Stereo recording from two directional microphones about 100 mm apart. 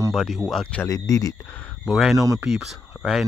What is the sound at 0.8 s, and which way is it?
Speech, 35° left (ahead or behind).